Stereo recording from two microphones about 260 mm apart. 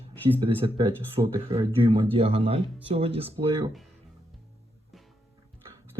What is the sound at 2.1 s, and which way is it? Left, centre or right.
Speech, right.